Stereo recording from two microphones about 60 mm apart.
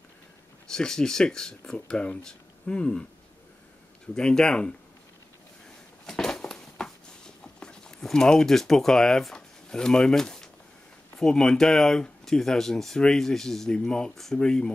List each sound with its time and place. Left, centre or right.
0.7 s speech: centre
4.1 s speech: centre
6.0 s a sound: centre
11.1 s speech: centre